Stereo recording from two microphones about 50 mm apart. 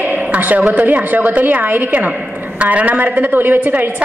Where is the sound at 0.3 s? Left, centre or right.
Right.